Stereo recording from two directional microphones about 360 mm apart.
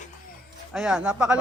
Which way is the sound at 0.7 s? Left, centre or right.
Centre.